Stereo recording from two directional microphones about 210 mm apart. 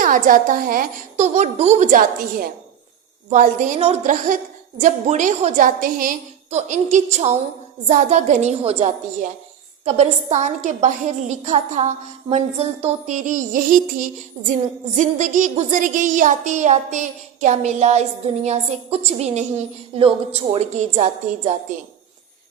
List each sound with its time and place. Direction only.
0.0 s a woman's voice: 40° right (ahead or behind)